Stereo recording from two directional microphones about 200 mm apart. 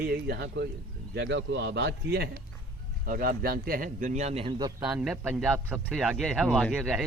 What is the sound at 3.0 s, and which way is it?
A man's voice, 45° right (ahead or behind).